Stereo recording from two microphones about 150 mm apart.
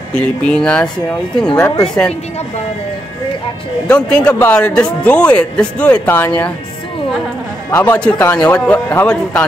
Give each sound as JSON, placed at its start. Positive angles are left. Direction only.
{"t": 0.1, "sound": "speech", "side_deg": 5}
{"t": 3.8, "sound": "speech", "side_deg": 5}
{"t": 7.7, "sound": "speech", "side_deg": 10}